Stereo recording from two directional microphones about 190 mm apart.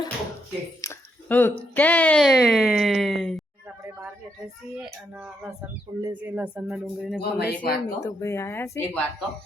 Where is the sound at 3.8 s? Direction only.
15° right (ahead or behind).